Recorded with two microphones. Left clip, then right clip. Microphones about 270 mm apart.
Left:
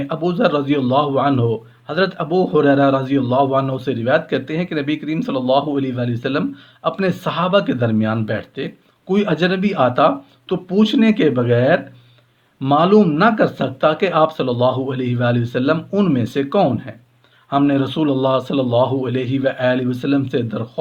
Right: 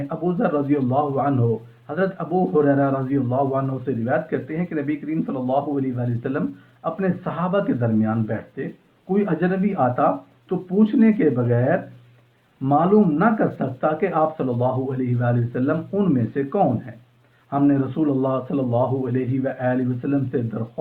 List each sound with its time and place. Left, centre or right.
0.1 s a man's voice: left